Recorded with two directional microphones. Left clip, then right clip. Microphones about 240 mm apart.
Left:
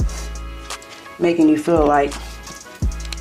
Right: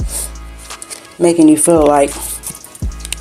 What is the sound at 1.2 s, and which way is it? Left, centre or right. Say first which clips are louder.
Speech: right 6 dB; right.